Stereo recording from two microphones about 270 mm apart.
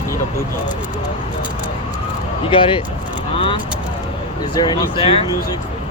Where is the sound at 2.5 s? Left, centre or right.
Centre.